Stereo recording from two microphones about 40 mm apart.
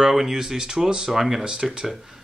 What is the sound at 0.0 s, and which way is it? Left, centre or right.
Speech, centre.